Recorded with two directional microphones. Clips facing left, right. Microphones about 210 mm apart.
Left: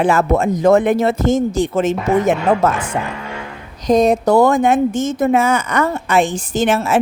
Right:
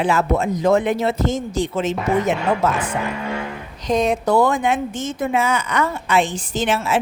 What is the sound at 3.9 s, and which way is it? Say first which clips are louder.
A woman's voice: left 5 dB; 40° left (ahead or behind).